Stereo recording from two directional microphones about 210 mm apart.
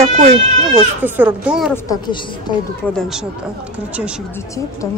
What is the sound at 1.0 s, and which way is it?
Speech, 10° right (ahead or behind).